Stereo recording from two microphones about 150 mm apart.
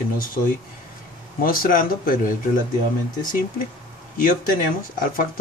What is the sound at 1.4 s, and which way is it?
Speech, 70° left (ahead or behind).